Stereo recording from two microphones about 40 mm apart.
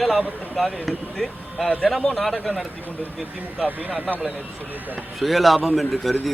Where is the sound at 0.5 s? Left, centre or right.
Centre.